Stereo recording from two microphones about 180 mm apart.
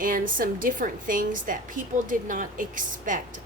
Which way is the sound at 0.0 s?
50° right (ahead or behind).